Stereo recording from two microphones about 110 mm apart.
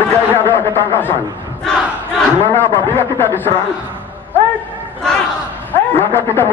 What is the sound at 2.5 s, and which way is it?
A man's voice, 20° left (ahead or behind).